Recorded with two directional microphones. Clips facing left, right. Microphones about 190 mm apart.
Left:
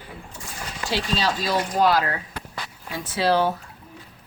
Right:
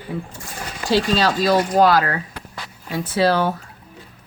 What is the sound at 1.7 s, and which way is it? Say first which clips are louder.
Speech: right 2 dB; 90° right.